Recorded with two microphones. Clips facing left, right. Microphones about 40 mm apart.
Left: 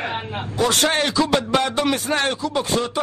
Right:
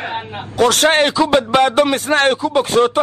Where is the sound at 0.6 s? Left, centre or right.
Right.